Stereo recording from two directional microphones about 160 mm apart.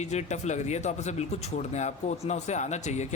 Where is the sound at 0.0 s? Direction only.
45° left (ahead or behind).